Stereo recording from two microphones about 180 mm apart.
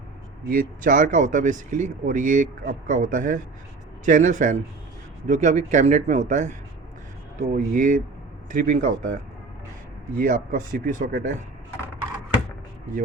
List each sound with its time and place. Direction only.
0.4 s speech: 50° right (ahead or behind)